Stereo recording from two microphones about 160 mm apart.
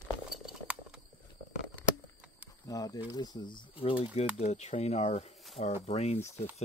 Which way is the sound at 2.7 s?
20° left (ahead or behind).